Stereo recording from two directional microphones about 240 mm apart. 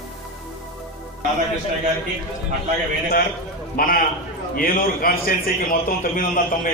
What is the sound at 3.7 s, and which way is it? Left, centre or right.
A man's voice, left.